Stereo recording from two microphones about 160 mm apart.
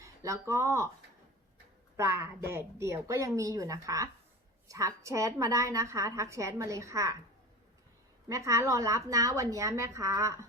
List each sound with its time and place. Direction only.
0.0 s speech: 20° right (ahead or behind)
2.0 s a woman's voice: 15° right (ahead or behind)
8.3 s a woman's voice: 20° right (ahead or behind)